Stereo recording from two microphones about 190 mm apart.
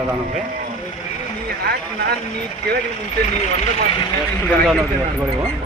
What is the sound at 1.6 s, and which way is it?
Speech, 55° right (ahead or behind).